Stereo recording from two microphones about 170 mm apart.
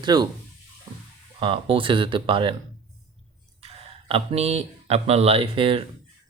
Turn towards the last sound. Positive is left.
turn(degrees=-30)  # may be behind; listen again after turning